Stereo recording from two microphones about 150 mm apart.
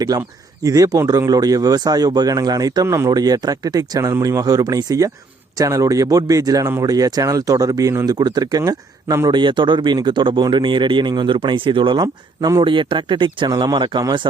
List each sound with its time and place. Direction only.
0.0 s speech: 25° right (ahead or behind)